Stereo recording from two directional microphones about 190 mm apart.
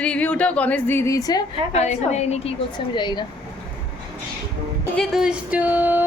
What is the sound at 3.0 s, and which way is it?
Speech, 25° left (ahead or behind).